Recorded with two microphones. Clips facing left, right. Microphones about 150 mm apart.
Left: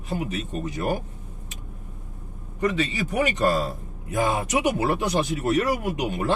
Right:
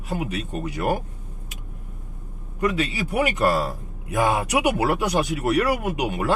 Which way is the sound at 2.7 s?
10° right (ahead or behind).